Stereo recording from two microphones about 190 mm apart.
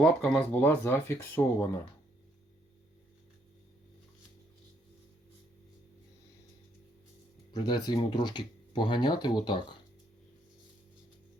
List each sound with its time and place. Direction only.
0.0 s speech: 5° left (ahead or behind)
7.5 s speech: 20° left (ahead or behind)